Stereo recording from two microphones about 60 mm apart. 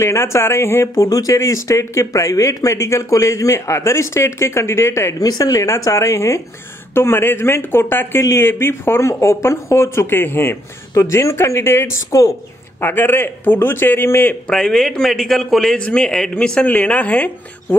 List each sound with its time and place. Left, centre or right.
0.0 s speech: left
5.2 s speech: left
6.9 s a man's voice: left
8.2 s speech: left
8.5 s speech: left
11.0 s speech: left
12.8 s a man's voice: left
14.5 s a man's voice: centre
16.6 s speech: left